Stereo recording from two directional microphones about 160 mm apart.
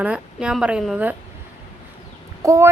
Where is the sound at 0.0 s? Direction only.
5° right (ahead or behind).